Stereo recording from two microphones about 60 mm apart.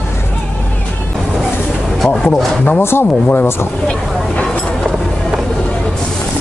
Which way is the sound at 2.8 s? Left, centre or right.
Left.